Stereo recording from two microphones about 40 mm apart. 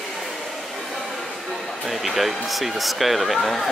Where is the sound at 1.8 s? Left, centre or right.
Centre.